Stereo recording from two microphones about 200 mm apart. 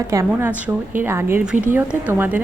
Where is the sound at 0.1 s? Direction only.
15° right (ahead or behind).